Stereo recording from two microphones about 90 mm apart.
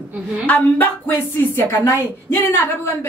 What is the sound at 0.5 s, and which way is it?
A woman's voice, 20° left (ahead or behind).